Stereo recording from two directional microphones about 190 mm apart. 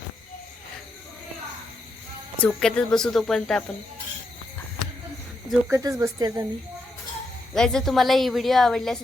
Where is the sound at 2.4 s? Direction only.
5° left (ahead or behind).